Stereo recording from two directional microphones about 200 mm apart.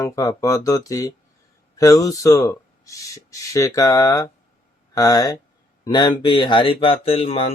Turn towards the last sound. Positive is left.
turn(degrees=30)  # may be behind; listen again after turning